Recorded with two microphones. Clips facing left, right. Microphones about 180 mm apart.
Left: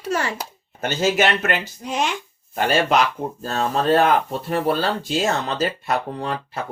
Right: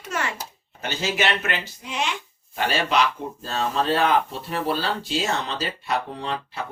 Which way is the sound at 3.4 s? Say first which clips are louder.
Left 3 dB; 45° left (ahead or behind).